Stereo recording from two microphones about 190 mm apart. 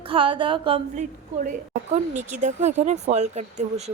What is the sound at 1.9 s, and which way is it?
Speech, 40° right (ahead or behind).